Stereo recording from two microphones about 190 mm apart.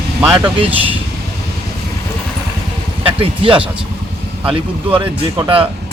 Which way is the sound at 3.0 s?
30° right (ahead or behind).